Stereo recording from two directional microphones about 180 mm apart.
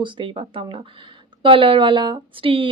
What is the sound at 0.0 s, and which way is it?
Speech, 30° right (ahead or behind).